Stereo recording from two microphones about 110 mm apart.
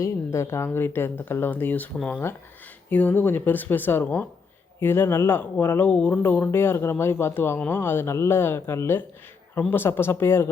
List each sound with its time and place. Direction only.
0.0 s speech: 25° left (ahead or behind)